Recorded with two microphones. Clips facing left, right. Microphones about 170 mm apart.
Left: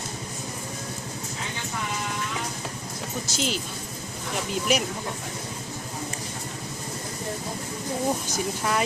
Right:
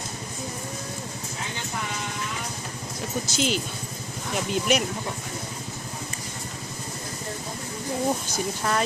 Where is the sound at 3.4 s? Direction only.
Centre (ahead or behind).